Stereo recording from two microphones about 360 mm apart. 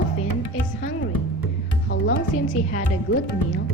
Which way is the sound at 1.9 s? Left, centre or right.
Left.